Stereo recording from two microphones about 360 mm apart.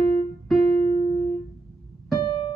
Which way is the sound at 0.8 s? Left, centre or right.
Centre.